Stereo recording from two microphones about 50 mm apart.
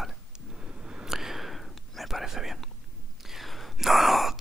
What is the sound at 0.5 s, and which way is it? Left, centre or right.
Whispering, centre.